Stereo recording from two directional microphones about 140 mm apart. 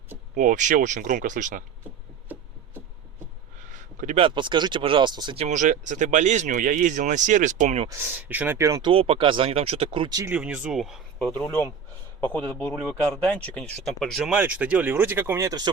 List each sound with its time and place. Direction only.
0.3 s speech: 65° right (ahead or behind)
3.7 s a sound: 65° right (ahead or behind)
4.2 s speech: 35° right (ahead or behind)
5.4 s speech: 60° right (ahead or behind)
7.9 s speech: 15° right (ahead or behind)
8.8 s speech: 40° right (ahead or behind)
10.2 s speech: 10° right (ahead or behind)
11.3 s speech: 15° left (ahead or behind)
14.3 s speech: 10° right (ahead or behind); by 15.7 s 25° right (ahead or behind)